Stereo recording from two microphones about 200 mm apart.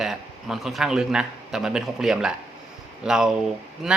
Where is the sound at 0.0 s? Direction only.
Centre (ahead or behind).